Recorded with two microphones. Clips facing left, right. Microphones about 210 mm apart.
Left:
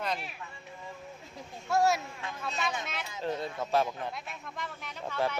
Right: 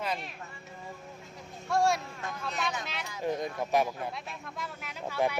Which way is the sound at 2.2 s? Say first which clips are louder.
Right 2 dB; 45° right (ahead or behind).